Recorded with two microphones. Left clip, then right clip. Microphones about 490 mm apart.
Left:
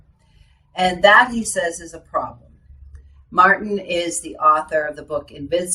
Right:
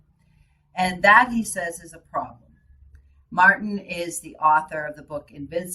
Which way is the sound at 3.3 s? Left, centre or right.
Right.